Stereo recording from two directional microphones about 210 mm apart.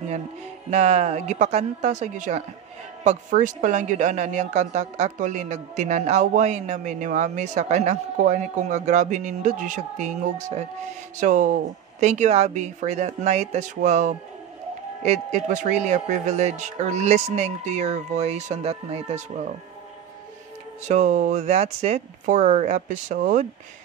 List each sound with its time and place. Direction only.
0.7 s speech: 30° right (ahead or behind)
20.8 s speech: 35° right (ahead or behind)